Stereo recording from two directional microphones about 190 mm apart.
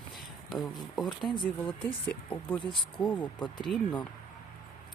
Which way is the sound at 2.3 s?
5° left (ahead or behind).